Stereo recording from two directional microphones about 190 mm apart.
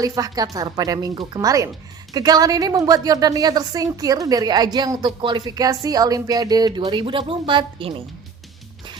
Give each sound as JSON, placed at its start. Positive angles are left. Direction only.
{"t": 0.0, "sound": "a woman's voice", "side_deg": -20}